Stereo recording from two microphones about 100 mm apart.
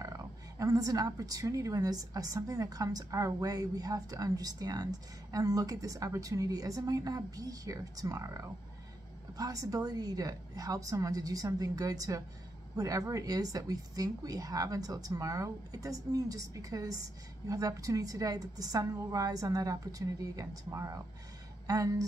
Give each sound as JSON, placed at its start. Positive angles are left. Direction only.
{"t": 0.0, "sound": "a woman's voice", "side_deg": -35}